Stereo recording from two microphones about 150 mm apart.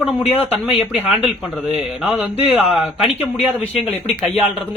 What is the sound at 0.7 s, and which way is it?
A man's voice, 5° right (ahead or behind).